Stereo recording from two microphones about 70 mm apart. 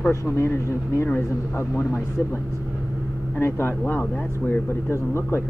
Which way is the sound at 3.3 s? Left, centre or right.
Left.